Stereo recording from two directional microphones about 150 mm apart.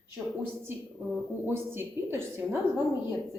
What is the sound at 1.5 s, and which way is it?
A woman's voice, 15° right (ahead or behind).